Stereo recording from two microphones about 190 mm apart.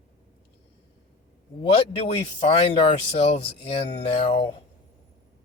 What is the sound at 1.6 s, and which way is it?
Speech, 30° left (ahead or behind).